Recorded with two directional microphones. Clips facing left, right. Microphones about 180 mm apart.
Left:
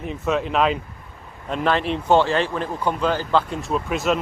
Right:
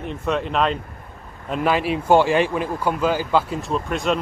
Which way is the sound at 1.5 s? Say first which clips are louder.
Right 1 dB; 10° right (ahead or behind).